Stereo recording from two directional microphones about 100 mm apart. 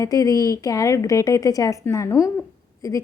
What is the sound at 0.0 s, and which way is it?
A woman's voice, 35° left (ahead or behind).